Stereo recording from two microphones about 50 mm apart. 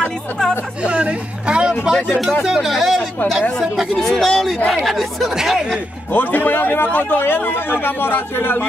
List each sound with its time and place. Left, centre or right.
0.8 s speech: right; by 5.8 s centre
6.1 s a man's voice: left